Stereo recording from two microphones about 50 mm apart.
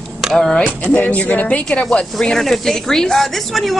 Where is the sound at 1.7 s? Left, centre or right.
Left.